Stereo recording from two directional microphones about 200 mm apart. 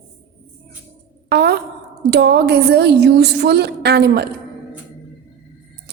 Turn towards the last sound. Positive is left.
turn(degrees=-55)  # may be behind; listen again after turning